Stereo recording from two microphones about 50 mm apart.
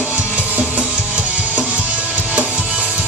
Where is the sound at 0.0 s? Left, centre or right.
Right.